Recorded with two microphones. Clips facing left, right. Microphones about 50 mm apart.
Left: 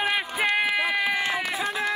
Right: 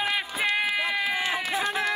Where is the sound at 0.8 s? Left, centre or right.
Left.